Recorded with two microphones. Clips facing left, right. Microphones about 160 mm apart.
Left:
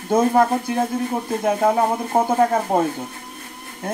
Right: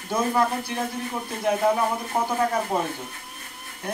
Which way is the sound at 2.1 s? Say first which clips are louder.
Left 7 dB; 30° left (ahead or behind).